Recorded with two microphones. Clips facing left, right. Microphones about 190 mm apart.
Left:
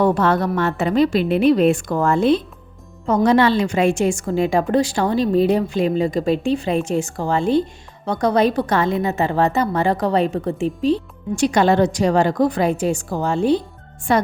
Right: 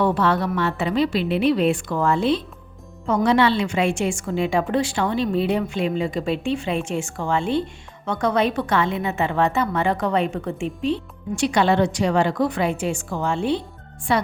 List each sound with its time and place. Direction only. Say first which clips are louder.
0.0 s a woman's voice: left 3 dB; 45° left (ahead or behind)